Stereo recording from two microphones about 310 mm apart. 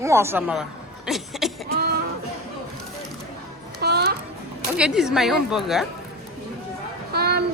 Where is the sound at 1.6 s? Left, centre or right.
Right.